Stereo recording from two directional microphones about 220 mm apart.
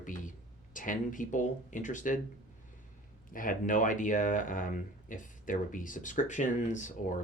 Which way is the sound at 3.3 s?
40° left (ahead or behind).